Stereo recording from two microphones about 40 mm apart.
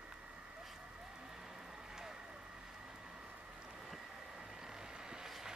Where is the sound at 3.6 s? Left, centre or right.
Right.